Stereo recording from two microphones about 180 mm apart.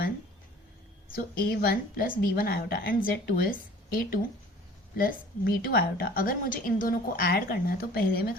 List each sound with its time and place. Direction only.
1.1 s a woman's voice: 55° left (ahead or behind)